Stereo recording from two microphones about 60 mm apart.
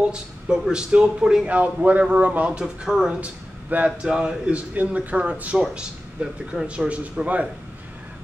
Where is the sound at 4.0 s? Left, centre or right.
Centre.